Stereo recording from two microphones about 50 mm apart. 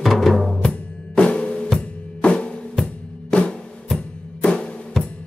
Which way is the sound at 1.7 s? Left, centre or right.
Left.